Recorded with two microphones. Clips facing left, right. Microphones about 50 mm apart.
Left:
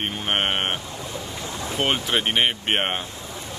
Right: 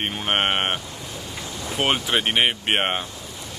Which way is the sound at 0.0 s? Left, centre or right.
Centre.